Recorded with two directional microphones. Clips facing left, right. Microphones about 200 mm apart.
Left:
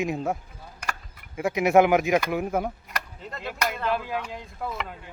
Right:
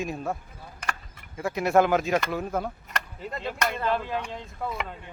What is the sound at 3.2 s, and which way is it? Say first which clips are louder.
Speech: right 1 dB; centre (ahead or behind).